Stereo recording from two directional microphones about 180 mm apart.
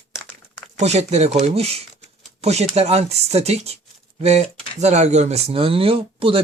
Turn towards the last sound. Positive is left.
turn(degrees=-30)  # may be behind; listen again after turning